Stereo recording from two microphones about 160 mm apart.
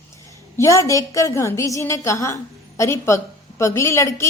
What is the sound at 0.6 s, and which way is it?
A woman's voice, 20° left (ahead or behind).